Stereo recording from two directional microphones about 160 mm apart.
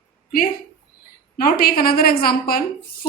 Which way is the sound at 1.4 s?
65° left (ahead or behind).